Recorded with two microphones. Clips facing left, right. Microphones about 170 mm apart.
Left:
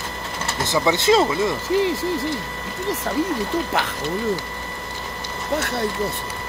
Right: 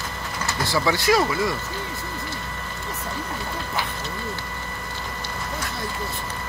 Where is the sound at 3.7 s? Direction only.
90° left.